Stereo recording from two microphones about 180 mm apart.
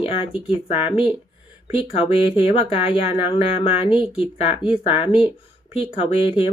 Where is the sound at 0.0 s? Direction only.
30° left (ahead or behind).